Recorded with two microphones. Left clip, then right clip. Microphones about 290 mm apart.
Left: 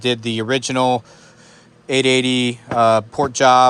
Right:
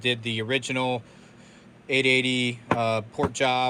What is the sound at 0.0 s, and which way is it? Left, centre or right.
Speech, centre.